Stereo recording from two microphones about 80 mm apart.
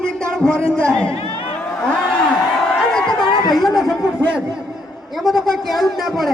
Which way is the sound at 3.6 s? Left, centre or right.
Centre.